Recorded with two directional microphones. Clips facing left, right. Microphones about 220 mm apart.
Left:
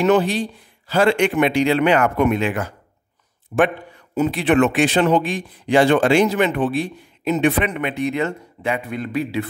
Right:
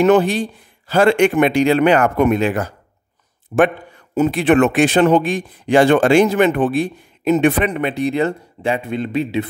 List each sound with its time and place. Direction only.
0.0 s a man's voice: 50° right (ahead or behind)
7.7 s speech: 35° right (ahead or behind)